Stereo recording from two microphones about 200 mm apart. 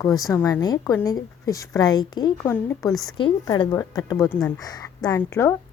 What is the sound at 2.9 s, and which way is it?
Speech, centre (ahead or behind).